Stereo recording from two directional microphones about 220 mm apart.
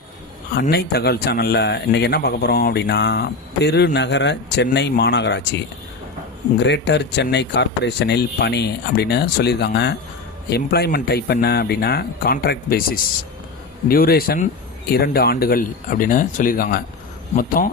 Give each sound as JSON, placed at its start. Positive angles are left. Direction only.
{"t": 0.6, "sound": "speech", "side_deg": 45}
{"t": 6.6, "sound": "speech", "side_deg": 50}